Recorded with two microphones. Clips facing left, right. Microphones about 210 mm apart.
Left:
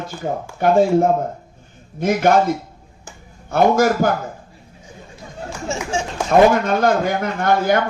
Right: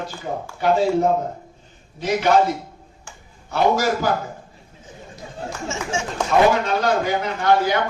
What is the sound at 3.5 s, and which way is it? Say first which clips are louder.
Speech: left 4 dB; 50° left (ahead or behind).